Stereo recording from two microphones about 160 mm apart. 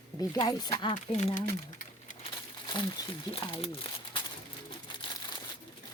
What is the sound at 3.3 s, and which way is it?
Speech, 35° left (ahead or behind).